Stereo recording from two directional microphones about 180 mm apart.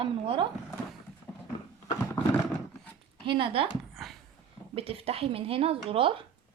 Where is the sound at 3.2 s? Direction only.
30° right (ahead or behind).